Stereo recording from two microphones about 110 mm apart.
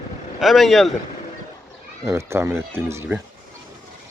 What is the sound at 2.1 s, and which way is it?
Speech, 25° right (ahead or behind).